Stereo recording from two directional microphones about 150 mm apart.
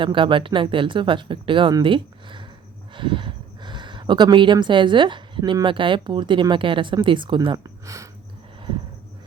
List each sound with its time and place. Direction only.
0.0 s speech: 35° right (ahead or behind)